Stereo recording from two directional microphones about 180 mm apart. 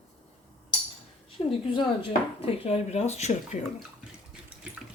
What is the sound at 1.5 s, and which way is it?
A woman's voice, 30° left (ahead or behind).